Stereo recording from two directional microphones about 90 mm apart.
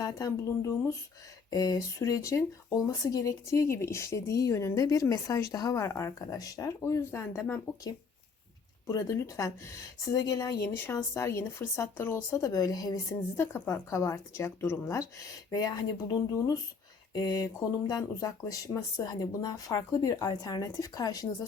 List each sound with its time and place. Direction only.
0.0 s a woman's voice: 40° left (ahead or behind)
8.9 s a woman's voice: 35° left (ahead or behind)
15.4 s a woman's voice: 45° left (ahead or behind)